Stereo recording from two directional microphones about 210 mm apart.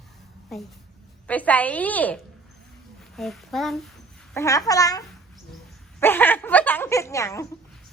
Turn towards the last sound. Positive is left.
turn(degrees=15)  # may be behind; listen again after turning